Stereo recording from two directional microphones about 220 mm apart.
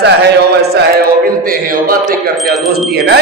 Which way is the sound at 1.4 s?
40° right (ahead or behind).